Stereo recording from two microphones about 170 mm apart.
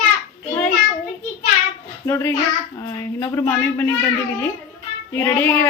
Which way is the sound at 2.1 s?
15° left (ahead or behind).